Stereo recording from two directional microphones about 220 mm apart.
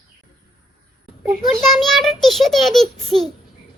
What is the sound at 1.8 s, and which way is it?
A child's voice, centre (ahead or behind).